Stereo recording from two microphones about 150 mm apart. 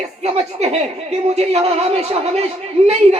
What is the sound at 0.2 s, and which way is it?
A man's voice, 45° right (ahead or behind).